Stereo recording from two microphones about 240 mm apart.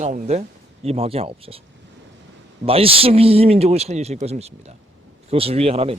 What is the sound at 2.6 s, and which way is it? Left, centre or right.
A man's voice, right.